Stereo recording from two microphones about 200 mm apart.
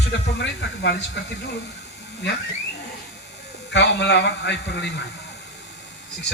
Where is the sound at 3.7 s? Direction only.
60° left (ahead or behind).